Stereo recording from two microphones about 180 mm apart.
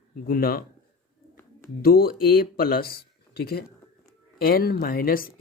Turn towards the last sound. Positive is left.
turn(degrees=55)  # may be behind; listen again after turning